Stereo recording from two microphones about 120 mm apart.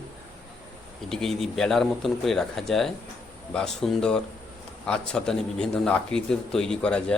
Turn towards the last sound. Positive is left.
turn(degrees=10)  # may be behind; listen again after turning